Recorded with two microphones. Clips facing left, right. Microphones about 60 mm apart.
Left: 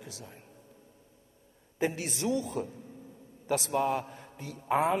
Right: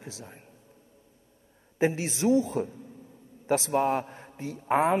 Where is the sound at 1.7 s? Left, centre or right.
Right.